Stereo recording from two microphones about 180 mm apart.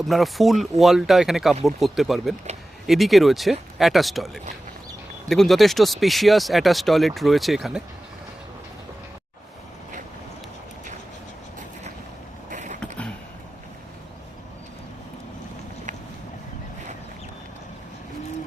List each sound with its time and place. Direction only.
0.1 s speech: centre (ahead or behind)
5.3 s speech: centre (ahead or behind)
12.5 s vehicle: 40° right (ahead or behind)